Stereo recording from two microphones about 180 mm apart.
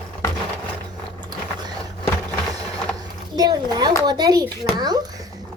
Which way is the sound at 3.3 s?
20° right (ahead or behind).